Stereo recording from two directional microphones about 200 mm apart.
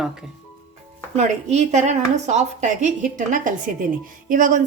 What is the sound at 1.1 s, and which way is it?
A woman's voice, 35° right (ahead or behind).